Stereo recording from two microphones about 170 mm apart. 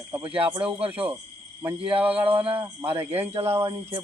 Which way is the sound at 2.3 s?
35° right (ahead or behind).